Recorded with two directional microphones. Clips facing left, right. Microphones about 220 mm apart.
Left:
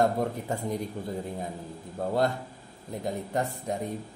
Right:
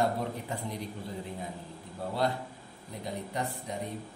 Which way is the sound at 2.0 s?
45° left (ahead or behind).